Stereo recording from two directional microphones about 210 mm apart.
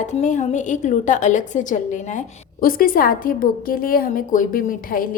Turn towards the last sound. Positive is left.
turn(degrees=40)  # may be behind; listen again after turning